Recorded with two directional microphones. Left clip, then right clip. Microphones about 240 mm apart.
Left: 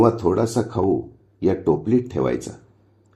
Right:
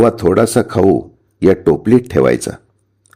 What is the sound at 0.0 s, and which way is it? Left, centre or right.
Speech, right.